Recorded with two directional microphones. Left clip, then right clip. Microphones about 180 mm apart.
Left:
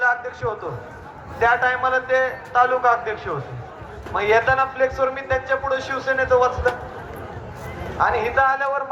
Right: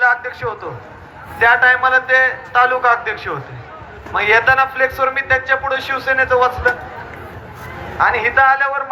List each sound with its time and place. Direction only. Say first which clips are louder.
0.0 s a man's voice: right 5 dB; 10° right (ahead or behind)
7.9 s a man's voice: right 5 dB; 10° right (ahead or behind)